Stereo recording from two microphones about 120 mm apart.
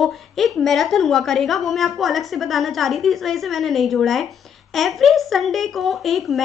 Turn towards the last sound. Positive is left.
turn(degrees=0)  # may be behind; listen again after turning